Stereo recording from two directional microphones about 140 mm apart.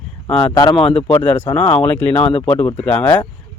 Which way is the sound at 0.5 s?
30° left (ahead or behind).